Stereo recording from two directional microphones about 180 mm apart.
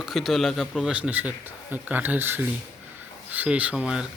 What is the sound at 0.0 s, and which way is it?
Speech, centre (ahead or behind).